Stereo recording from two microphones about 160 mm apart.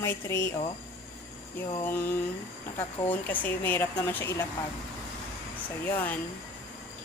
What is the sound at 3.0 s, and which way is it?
A woman's voice, 10° left (ahead or behind).